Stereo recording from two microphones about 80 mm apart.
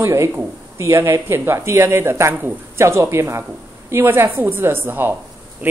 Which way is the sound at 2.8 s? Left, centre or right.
Right.